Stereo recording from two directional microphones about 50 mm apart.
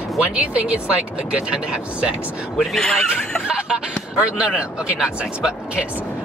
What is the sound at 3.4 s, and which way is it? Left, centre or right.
Speech, centre.